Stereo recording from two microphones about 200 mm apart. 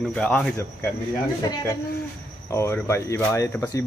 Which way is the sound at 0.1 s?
5° left (ahead or behind).